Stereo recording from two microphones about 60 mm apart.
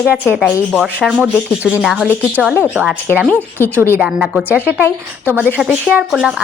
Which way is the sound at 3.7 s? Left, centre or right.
Right.